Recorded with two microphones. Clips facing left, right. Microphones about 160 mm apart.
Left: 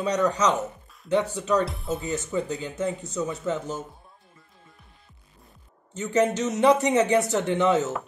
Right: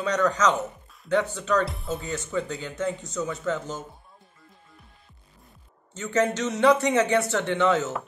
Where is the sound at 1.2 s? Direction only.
35° left (ahead or behind).